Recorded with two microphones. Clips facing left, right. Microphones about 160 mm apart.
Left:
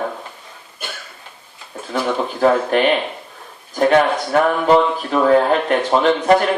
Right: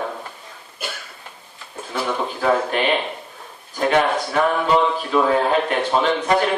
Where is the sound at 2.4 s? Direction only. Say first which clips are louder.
Left 5 dB; 45° left (ahead or behind).